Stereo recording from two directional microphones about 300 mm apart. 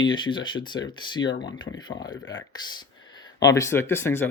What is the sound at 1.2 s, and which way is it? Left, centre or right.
Speech, left.